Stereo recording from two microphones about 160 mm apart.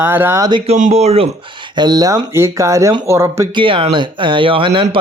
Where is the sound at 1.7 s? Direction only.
25° right (ahead or behind).